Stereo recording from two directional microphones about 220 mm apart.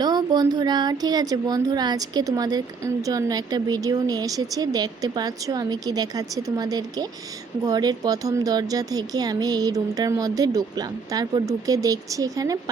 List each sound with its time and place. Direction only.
0.0 s speech: 20° right (ahead or behind)